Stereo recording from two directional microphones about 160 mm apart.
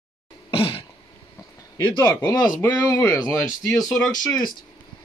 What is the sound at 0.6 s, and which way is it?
Throat clearing, 35° left (ahead or behind).